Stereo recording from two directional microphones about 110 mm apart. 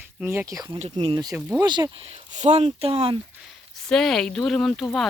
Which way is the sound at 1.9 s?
70° right (ahead or behind).